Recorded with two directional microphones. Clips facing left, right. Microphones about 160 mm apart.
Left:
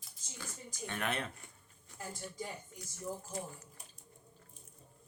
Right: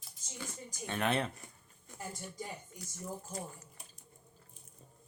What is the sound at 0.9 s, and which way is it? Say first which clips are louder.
Speech: right 5 dB; 25° right (ahead or behind).